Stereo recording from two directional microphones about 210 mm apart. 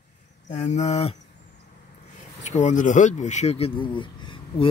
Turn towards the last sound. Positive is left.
turn(degrees=25)  # may be behind; listen again after turning